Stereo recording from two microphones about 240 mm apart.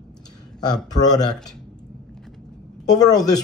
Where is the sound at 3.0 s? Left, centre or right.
Centre.